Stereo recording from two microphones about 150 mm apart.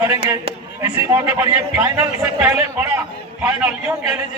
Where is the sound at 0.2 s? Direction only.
35° right (ahead or behind).